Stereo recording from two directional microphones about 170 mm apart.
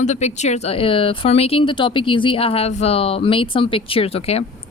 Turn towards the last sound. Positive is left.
turn(degrees=35)  # may be behind; listen again after turning